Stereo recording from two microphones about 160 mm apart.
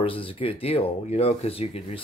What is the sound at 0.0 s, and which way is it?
Speech, 35° left (ahead or behind).